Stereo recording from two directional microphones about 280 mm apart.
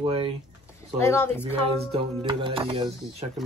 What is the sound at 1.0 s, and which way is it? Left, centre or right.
Speech, centre.